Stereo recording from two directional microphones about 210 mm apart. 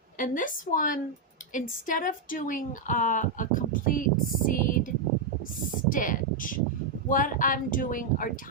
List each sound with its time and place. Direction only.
0.2 s speech: 40° left (ahead or behind)
5.9 s speech: 40° left (ahead or behind)